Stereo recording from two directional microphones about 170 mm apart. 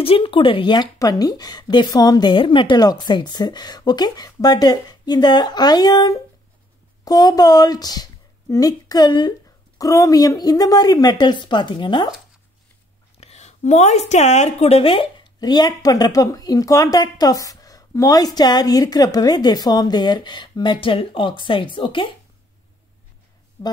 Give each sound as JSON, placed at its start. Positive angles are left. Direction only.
{"t": 0.0, "sound": "speech", "side_deg": 30}
{"t": 13.2, "sound": "speech", "side_deg": 40}
{"t": 23.6, "sound": "speech", "side_deg": 20}